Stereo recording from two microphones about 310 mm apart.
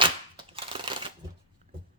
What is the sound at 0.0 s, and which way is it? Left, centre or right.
Crunch, centre.